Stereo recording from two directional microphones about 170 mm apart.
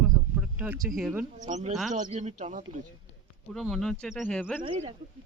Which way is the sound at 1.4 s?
45° right (ahead or behind).